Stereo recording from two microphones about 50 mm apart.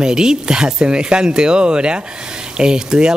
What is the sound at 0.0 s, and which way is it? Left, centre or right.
Speech, centre.